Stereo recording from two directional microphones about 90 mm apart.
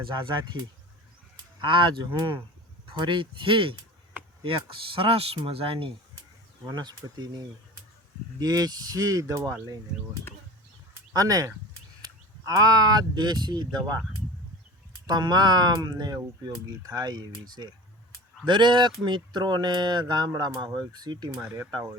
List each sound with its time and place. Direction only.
0.1 s speech: 60° right (ahead or behind)
1.6 s speech: 60° right (ahead or behind); by 5.9 s 85° right
6.7 s speech: 50° right (ahead or behind); by 9.6 s 35° right (ahead or behind)
11.1 s speech: 40° right (ahead or behind)
15.0 s speech: 50° right (ahead or behind)
18.4 s speech: 60° right (ahead or behind)